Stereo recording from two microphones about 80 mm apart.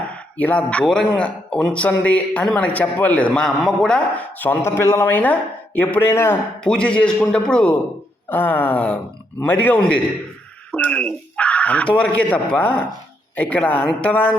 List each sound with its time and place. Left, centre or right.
0.1 s a sound: centre
0.9 s speech: centre
3.4 s speech: centre
4.4 s speech: left
4.8 s speech: left
5.0 s speech: left
6.1 s speech: left
6.7 s speech: centre
8.3 s speech: left